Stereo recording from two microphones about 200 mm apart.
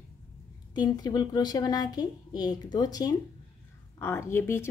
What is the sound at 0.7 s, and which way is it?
A woman's voice, 20° left (ahead or behind).